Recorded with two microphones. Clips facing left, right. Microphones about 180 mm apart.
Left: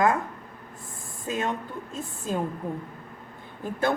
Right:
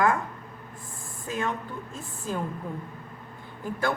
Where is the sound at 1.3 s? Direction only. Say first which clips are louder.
Left 1 dB; 20° left (ahead or behind).